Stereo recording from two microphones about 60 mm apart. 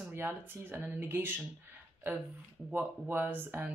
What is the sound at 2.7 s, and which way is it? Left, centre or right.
Speech, right.